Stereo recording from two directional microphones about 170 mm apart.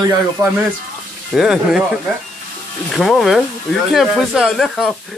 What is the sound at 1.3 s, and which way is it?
Speech, centre (ahead or behind).